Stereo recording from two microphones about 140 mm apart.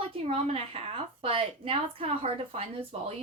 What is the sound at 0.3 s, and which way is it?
A woman's voice, 40° right (ahead or behind).